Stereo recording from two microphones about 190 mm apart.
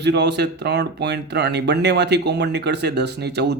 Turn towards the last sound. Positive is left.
turn(degrees=-60)  # may be behind; listen again after turning